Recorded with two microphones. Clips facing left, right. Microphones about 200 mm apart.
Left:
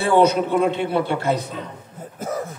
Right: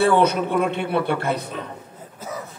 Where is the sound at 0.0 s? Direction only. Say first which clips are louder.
Left 1 dB; 60° right (ahead or behind).